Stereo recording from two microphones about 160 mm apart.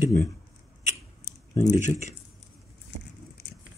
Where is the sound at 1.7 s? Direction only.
50° left (ahead or behind).